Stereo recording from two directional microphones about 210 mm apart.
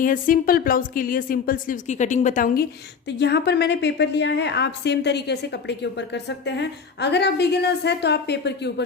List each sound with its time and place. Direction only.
0.0 s a woman's voice: 40° left (ahead or behind)
3.1 s a woman's voice: 55° left (ahead or behind)